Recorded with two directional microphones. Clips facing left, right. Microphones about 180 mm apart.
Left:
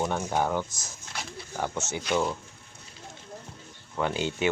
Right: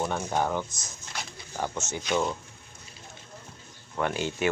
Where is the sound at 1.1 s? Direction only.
5° left (ahead or behind).